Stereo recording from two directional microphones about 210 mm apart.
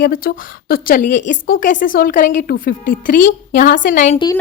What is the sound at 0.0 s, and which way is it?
A woman's voice, 45° left (ahead or behind).